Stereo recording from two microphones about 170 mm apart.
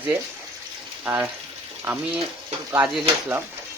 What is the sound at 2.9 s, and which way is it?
Speech, 10° right (ahead or behind).